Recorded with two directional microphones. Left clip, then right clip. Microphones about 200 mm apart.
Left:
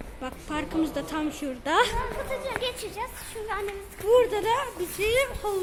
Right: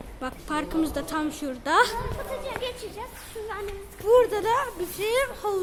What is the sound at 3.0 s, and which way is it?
Speech, 55° left (ahead or behind).